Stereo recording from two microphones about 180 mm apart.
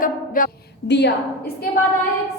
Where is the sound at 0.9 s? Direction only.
70° left (ahead or behind).